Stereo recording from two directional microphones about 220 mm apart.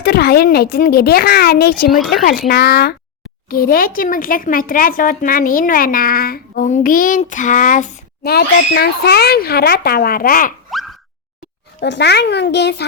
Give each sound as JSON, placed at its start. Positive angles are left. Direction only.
{"t": 0.0, "sound": "a child's voice", "side_deg": 45}
{"t": 10.7, "sound": "boing", "side_deg": 0}
{"t": 11.8, "sound": "a child's voice", "side_deg": 50}